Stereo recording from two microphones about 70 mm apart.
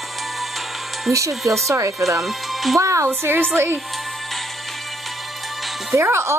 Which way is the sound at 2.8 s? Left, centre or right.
Right.